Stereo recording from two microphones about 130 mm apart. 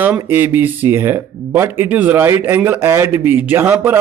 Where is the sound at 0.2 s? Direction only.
15° right (ahead or behind).